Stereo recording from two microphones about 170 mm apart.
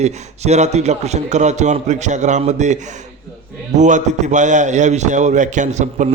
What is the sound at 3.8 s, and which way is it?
A man's voice, 45° right (ahead or behind).